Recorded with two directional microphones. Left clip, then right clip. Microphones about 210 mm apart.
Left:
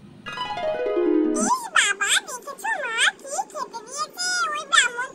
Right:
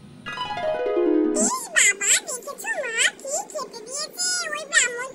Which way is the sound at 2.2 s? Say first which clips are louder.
Left 1 dB; 45° left (ahead or behind).